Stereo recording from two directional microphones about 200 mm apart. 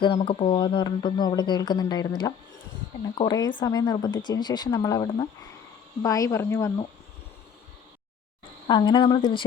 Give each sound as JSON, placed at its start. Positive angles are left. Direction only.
{"t": 0.2, "sound": "speech", "side_deg": 30}
{"t": 8.6, "sound": "speech", "side_deg": 20}